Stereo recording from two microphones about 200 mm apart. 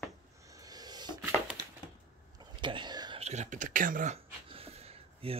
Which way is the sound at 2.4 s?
25° right (ahead or behind).